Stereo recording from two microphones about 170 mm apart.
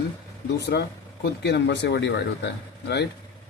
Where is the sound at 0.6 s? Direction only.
75° left (ahead or behind).